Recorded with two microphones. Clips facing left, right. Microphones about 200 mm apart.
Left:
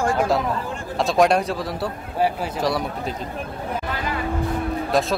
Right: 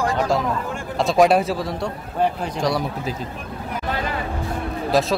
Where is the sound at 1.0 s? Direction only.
Centre (ahead or behind).